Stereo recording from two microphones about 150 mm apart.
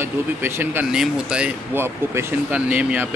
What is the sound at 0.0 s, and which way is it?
Speech, 15° right (ahead or behind).